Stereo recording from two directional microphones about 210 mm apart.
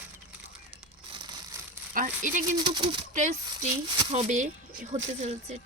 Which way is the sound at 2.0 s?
40° right (ahead or behind).